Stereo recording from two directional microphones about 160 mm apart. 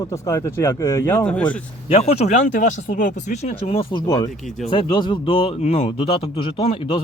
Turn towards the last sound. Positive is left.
turn(degrees=35)  # may be behind; listen again after turning